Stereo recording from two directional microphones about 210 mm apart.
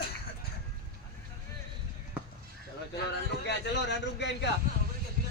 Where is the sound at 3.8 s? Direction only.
55° left (ahead or behind).